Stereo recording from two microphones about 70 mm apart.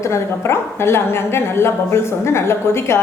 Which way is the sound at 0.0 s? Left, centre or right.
Left.